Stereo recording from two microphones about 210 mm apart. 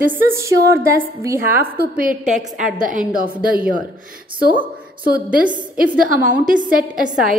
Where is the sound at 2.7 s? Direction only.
40° right (ahead or behind).